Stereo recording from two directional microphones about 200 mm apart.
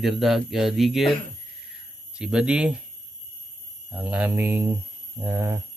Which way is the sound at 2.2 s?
5° right (ahead or behind).